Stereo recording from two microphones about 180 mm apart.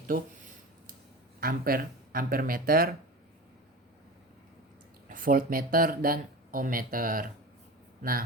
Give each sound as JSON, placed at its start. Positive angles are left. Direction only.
{"t": 0.1, "sound": "a sound", "side_deg": -50}
{"t": 1.4, "sound": "speech", "side_deg": -55}
{"t": 5.0, "sound": "speech", "side_deg": -50}